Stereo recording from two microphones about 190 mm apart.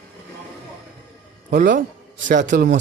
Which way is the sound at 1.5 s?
45° right (ahead or behind).